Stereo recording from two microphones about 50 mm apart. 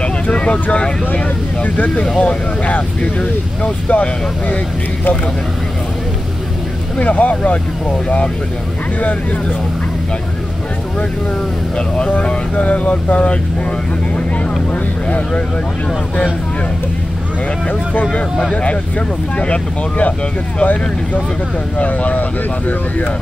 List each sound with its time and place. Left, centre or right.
0.0 s speech: left
7.0 s speech: left
12.1 s speech: left
15.0 s speech: left
18.5 s speech: left